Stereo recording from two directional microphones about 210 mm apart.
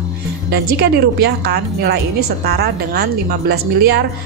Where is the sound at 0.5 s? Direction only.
50° right (ahead or behind).